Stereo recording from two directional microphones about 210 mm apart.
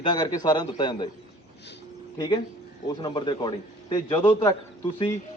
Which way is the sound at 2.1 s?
20° left (ahead or behind).